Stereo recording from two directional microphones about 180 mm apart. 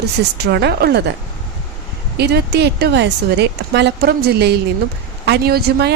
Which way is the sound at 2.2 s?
65° right (ahead or behind).